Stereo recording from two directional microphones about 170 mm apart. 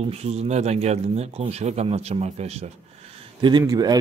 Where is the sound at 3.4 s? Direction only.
25° right (ahead or behind).